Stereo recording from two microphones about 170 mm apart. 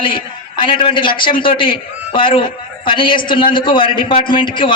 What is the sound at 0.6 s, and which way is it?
A man's voice, 30° left (ahead or behind).